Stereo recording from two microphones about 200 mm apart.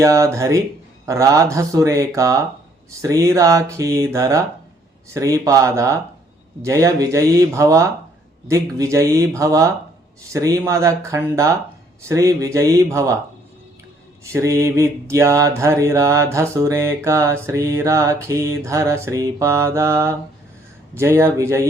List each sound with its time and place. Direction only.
0.0 s mantra: 15° right (ahead or behind)
14.3 s mantra: 15° right (ahead or behind)